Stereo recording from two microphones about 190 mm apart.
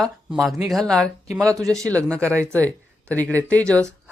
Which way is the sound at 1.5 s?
15° right (ahead or behind).